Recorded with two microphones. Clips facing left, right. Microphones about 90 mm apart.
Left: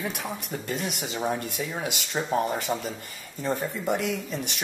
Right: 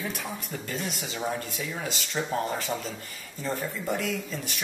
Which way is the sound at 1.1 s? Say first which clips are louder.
Left 3 dB; 15° left (ahead or behind).